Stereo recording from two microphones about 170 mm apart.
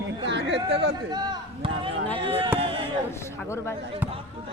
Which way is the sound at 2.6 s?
30° right (ahead or behind).